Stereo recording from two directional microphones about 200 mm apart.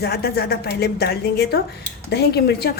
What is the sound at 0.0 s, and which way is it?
A woman's voice, 50° left (ahead or behind).